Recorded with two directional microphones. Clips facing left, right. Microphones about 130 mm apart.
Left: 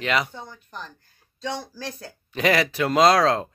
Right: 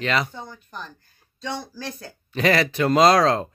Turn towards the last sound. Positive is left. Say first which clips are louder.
# right 1 dB
turn(degrees=0)  # may be behind; listen again after turning